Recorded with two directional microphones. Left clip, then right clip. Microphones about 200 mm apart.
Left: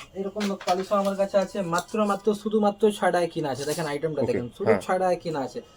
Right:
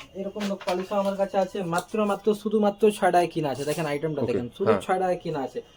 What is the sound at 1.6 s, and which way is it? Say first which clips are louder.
Speech: left 1 dB; 20° right (ahead or behind).